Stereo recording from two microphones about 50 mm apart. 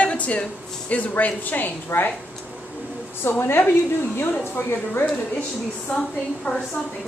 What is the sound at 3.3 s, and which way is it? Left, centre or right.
Speech, left.